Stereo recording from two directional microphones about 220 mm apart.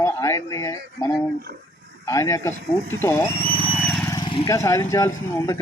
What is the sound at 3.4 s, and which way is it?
Vehicle, 25° right (ahead or behind).